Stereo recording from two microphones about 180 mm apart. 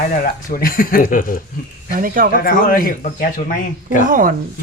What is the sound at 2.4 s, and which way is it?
Speech, 55° left (ahead or behind).